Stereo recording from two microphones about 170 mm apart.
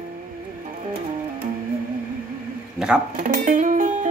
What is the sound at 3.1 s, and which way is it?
Music, 55° right (ahead or behind).